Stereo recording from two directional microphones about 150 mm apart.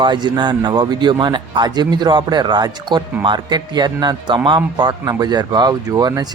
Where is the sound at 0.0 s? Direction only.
30° right (ahead or behind).